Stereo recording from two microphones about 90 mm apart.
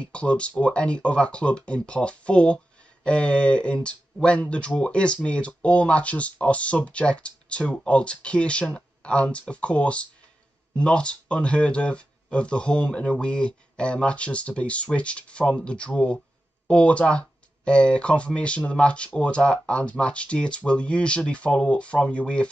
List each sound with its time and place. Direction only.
0.0 s speech: 15° left (ahead or behind)